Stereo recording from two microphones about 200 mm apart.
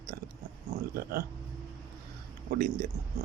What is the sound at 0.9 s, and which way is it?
Speech, 50° right (ahead or behind).